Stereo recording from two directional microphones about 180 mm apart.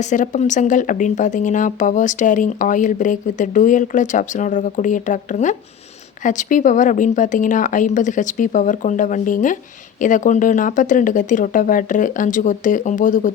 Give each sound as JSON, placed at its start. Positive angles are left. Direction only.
{"t": 0.0, "sound": "speech", "side_deg": 40}